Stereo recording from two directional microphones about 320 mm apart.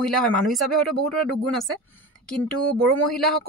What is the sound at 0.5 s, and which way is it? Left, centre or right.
Speech, centre.